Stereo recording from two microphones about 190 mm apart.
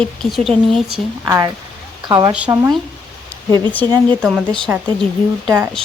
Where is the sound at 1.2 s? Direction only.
20° right (ahead or behind).